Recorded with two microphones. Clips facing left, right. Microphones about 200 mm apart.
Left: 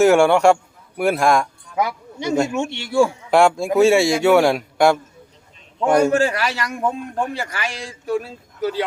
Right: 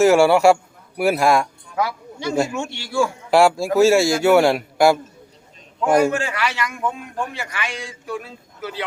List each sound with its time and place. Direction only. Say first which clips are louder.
0.0 s a man's voice: even; centre (ahead or behind)
1.7 s speech: left 1 dB; 20° left (ahead or behind)
3.2 s a man's voice: even; 5° right (ahead or behind)
6.1 s a man's voice: left 5 dB; 35° left (ahead or behind)